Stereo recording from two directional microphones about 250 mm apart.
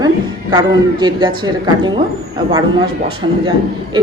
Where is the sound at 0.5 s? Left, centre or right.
Centre.